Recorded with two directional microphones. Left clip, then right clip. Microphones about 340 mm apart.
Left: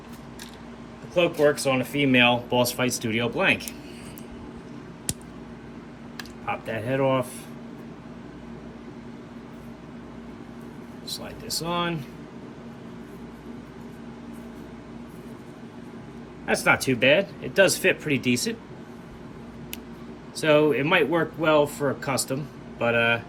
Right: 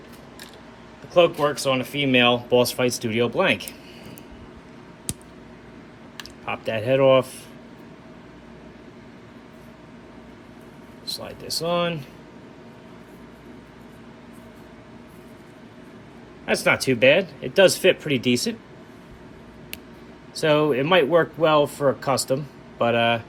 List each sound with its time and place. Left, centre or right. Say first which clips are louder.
1.1 s speech: right 3 dB; centre
6.4 s speech: right 3 dB; centre
11.0 s a sound: right 4 dB; centre
16.5 s speech: right 1 dB; centre
20.4 s speech: even; centre